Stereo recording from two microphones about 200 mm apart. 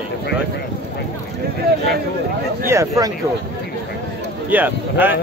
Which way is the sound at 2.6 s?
15° right (ahead or behind).